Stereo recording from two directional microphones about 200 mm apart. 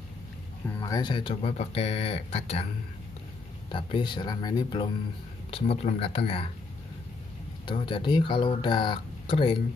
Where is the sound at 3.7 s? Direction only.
25° left (ahead or behind).